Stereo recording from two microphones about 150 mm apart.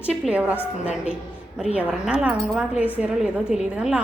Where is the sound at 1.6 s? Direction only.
5° right (ahead or behind).